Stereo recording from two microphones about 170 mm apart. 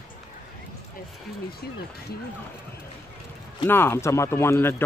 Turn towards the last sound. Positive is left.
turn(degrees=15)  # may be behind; listen again after turning